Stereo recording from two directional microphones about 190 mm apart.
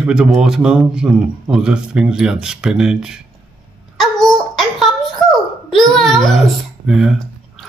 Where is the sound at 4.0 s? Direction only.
Centre (ahead or behind).